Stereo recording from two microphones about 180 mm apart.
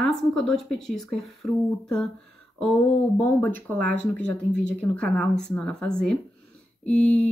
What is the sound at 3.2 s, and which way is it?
Speech, 10° left (ahead or behind).